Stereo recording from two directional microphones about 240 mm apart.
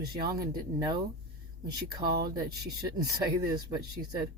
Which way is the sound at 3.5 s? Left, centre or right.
Centre.